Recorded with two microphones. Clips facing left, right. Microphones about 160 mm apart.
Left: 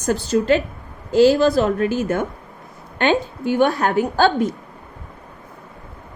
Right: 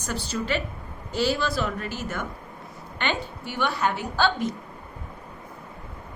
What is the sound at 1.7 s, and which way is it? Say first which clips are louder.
Speech: left 12 dB; 50° left (ahead or behind).